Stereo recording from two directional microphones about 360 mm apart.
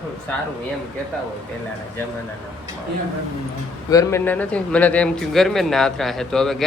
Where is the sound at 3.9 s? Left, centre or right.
Centre.